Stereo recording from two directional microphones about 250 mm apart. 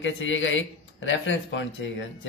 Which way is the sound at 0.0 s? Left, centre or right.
Left.